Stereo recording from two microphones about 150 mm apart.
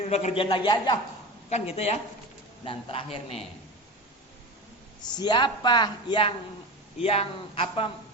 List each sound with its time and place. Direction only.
0.0 s a man's voice: 50° left (ahead or behind); by 0.9 s 30° left (ahead or behind)
1.5 s a man's voice: 45° left (ahead or behind)
5.0 s a man's voice: 30° left (ahead or behind)